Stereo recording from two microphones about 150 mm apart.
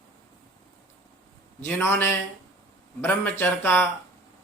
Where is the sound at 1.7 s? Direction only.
15° left (ahead or behind).